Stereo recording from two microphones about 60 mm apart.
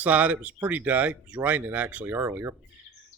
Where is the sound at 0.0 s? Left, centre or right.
Right.